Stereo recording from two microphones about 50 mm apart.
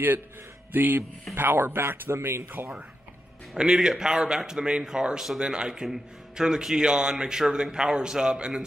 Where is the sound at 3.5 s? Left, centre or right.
Centre.